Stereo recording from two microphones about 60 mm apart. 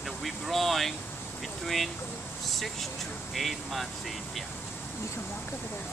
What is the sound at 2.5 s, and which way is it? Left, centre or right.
Speech, centre.